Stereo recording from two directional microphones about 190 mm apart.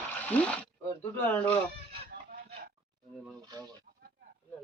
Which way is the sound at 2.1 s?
50° right (ahead or behind).